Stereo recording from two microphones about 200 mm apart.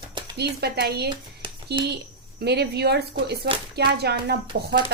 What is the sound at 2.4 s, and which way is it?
A woman's voice, 55° right (ahead or behind).